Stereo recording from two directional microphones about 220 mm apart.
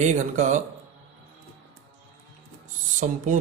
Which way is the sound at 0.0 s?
35° right (ahead or behind).